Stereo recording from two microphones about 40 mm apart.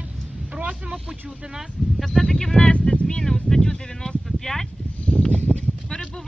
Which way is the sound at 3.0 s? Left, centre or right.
Centre.